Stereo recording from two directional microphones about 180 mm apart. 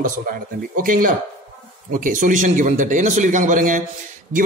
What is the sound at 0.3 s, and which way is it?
A man's voice, 55° right (ahead or behind).